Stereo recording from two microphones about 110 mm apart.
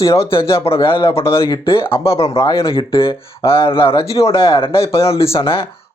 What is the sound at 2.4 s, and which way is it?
Speech, 30° left (ahead or behind).